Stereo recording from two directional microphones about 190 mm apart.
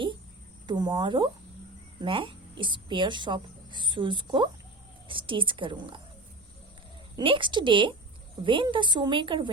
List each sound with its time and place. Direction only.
0.7 s a woman's voice: 20° right (ahead or behind)
7.2 s a woman's voice: 25° right (ahead or behind)